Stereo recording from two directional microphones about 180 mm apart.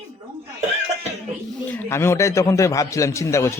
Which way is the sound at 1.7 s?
10° left (ahead or behind).